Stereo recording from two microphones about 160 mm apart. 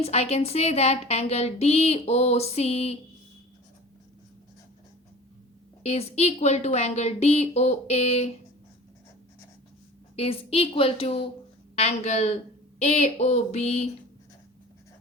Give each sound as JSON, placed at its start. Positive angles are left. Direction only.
{"t": 0.0, "sound": "a woman's voice", "side_deg": 40}
{"t": 5.8, "sound": "a woman's voice", "side_deg": 40}
{"t": 10.2, "sound": "a woman's voice", "side_deg": 35}
{"t": 11.8, "sound": "a sound", "side_deg": 45}